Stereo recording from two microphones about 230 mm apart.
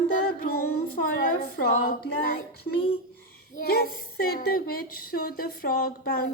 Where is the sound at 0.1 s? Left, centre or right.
Left.